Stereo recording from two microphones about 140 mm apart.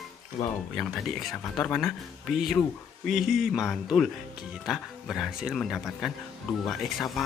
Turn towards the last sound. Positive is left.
turn(degrees=0)  # may be behind; listen again after turning